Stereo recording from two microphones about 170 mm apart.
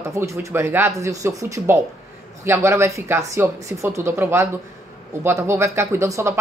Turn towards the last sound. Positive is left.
turn(degrees=-15)  # may be behind; listen again after turning